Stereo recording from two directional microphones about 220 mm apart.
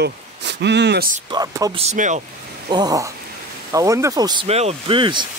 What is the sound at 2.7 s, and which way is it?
Speech, 15° right (ahead or behind).